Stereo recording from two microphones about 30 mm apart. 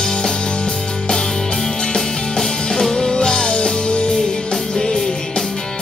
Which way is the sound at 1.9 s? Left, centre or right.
Centre.